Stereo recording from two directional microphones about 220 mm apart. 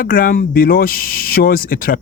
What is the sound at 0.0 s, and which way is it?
Speech, 40° left (ahead or behind).